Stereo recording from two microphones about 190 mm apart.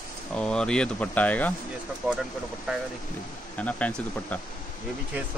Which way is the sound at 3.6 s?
5° left (ahead or behind).